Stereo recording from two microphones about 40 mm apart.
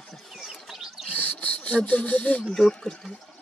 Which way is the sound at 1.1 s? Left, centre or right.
Left.